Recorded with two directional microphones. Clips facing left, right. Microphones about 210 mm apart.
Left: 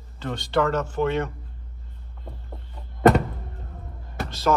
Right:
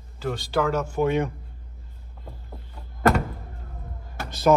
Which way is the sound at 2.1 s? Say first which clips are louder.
Left 1 dB; centre (ahead or behind).